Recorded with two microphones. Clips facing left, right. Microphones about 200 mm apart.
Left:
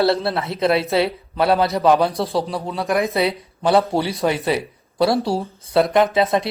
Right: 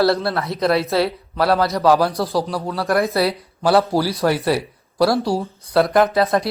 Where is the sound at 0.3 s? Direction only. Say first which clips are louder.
Even; centre (ahead or behind).